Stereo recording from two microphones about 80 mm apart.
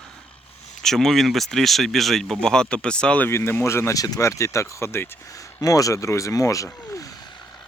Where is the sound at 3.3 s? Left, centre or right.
Left.